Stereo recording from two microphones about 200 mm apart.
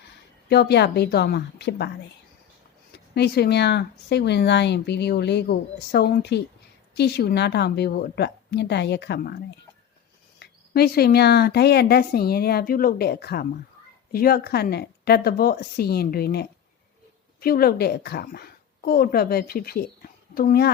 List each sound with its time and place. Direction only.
0.4 s speech: 55° left (ahead or behind)
3.2 s a woman's voice: 55° left (ahead or behind)